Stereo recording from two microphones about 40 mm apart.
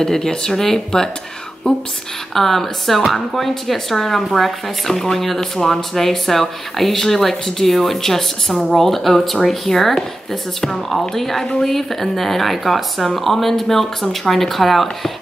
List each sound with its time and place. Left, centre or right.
0.0 s speech: centre
1.6 s a woman's voice: left
2.3 s speech: centre